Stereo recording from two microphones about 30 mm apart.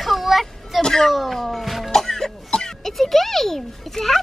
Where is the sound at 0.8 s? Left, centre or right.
Centre.